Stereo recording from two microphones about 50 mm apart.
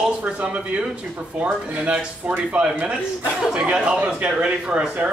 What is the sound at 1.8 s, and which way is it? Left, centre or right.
A man's voice, right.